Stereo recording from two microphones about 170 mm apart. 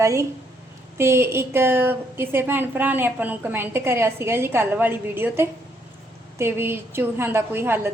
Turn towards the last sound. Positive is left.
turn(degrees=-15)  # may be behind; listen again after turning